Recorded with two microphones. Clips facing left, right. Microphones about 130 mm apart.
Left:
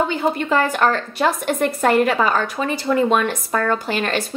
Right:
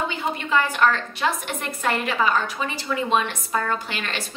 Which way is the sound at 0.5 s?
45° left (ahead or behind).